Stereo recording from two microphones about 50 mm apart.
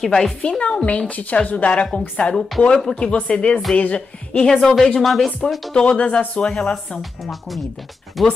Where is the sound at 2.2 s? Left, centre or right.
Centre.